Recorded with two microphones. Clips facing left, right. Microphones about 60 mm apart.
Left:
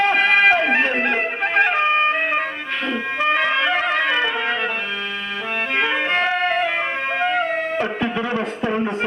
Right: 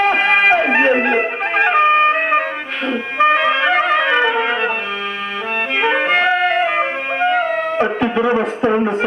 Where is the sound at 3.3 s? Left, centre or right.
Right.